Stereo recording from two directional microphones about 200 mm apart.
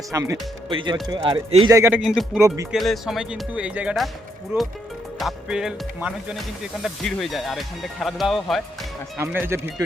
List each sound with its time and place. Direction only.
0.1 s speech: 15° right (ahead or behind)
1.7 s speech: 10° right (ahead or behind)